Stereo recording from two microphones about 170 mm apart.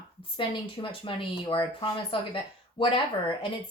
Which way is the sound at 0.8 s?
30° left (ahead or behind).